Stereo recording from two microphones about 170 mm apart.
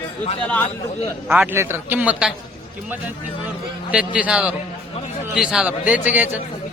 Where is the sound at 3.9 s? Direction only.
5° right (ahead or behind).